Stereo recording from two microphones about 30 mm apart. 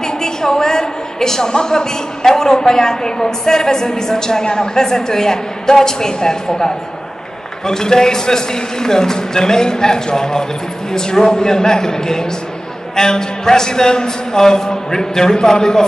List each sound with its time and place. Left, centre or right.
0.0 s a woman's voice: centre